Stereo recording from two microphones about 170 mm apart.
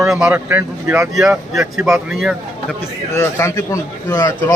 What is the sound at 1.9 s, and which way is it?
Speech, centre (ahead or behind).